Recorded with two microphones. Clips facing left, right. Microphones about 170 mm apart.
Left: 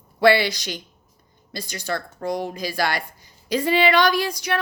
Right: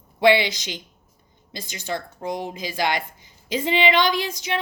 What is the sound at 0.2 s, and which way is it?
Speech, 20° right (ahead or behind).